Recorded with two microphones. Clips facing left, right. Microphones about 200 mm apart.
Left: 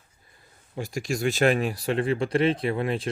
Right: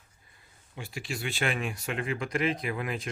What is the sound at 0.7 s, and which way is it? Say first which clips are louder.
Speech: left 8 dB; 45° left (ahead or behind).